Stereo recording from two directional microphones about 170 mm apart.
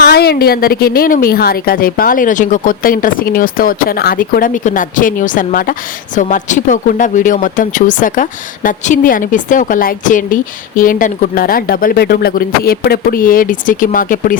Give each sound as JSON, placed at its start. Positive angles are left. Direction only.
{"t": 0.1, "sound": "a woman's voice", "side_deg": 65}